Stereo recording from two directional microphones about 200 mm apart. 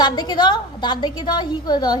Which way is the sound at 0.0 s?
20° left (ahead or behind).